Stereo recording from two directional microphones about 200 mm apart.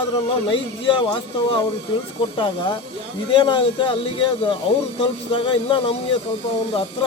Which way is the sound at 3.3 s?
25° left (ahead or behind).